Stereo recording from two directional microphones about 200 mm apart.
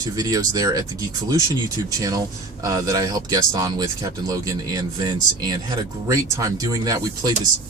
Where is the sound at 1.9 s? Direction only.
15° right (ahead or behind).